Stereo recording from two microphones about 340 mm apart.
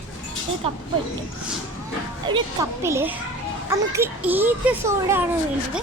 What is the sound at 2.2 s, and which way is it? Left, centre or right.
A child's voice, centre.